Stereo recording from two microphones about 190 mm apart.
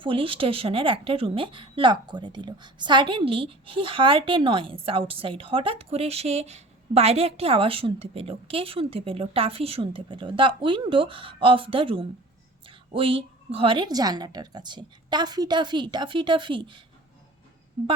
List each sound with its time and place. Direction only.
0.0 s a woman's voice: 25° right (ahead or behind)